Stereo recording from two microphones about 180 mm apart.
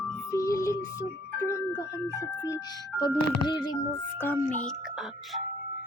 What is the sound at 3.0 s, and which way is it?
Speech, 25° left (ahead or behind).